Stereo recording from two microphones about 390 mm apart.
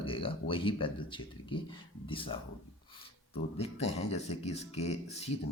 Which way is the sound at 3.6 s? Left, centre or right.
Centre.